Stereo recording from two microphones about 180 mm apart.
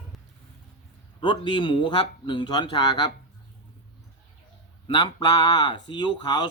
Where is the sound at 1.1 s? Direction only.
25° left (ahead or behind).